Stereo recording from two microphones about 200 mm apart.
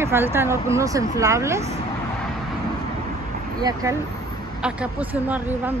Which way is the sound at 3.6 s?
15° right (ahead or behind).